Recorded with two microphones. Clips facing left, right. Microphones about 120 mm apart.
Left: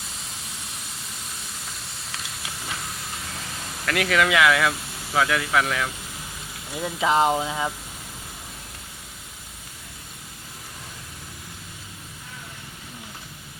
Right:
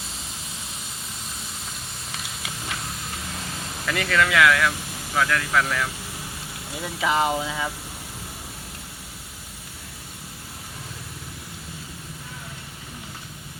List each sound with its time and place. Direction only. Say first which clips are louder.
3.8 s speech: left 1 dB; centre (ahead or behind)